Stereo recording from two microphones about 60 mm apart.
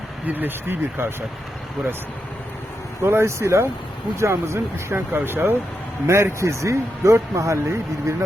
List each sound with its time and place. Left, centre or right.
0.3 s speech: right
3.0 s speech: right
6.1 s speech: right